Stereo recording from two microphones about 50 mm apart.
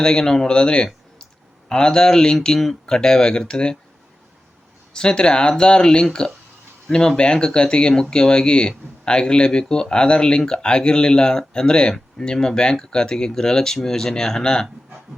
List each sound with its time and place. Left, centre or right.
0.0 s speech: centre
4.9 s speech: centre